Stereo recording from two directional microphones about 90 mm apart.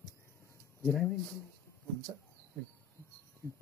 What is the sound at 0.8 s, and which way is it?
Speech, 10° left (ahead or behind).